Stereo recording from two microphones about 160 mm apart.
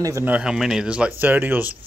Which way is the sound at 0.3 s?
5° right (ahead or behind).